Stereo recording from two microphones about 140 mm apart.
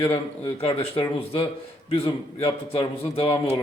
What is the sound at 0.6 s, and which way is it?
A man's voice, 40° left (ahead or behind).